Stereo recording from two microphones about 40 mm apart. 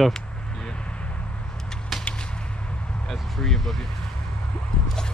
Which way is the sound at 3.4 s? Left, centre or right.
Centre.